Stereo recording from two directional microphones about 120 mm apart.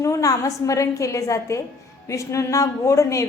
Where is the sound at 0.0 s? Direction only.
25° left (ahead or behind).